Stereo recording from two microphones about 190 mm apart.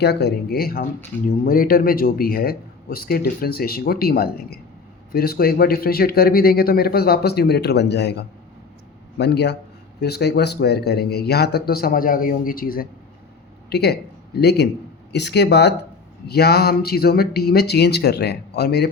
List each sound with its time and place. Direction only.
0.0 s a man's voice: 60° left (ahead or behind)